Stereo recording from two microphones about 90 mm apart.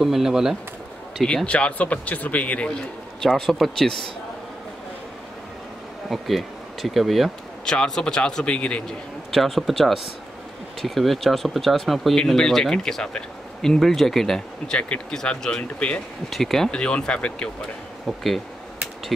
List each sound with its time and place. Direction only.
0.0 s speech: 5° right (ahead or behind)
1.2 s speech: 10° left (ahead or behind)
3.2 s speech: centre (ahead or behind)
6.0 s speech: centre (ahead or behind)
9.3 s speech: centre (ahead or behind)